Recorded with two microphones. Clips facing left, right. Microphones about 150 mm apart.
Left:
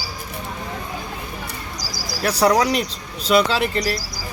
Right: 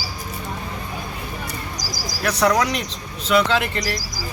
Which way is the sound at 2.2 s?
35° left (ahead or behind).